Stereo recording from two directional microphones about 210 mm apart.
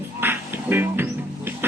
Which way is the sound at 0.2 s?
10° right (ahead or behind).